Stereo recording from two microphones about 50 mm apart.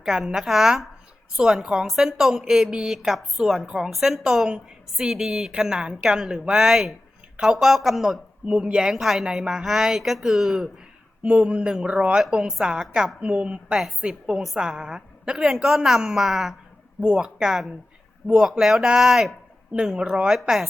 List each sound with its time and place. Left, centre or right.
0.0 s a woman's voice: centre
3.7 s a woman's voice: centre
8.4 s a woman's voice: centre
11.2 s a woman's voice: right; by 16.6 s centre
17.0 s a woman's voice: centre